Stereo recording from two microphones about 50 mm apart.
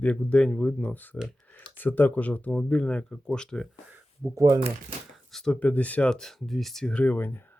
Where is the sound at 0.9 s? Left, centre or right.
Left.